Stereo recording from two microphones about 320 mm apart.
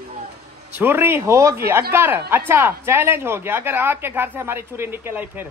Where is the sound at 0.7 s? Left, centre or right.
Centre.